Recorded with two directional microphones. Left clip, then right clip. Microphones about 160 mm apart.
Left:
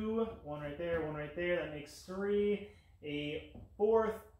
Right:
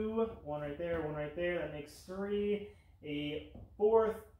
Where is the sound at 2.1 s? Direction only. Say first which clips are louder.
Even; 20° left (ahead or behind).